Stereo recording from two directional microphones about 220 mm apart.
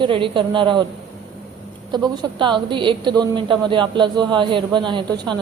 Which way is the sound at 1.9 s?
20° right (ahead or behind).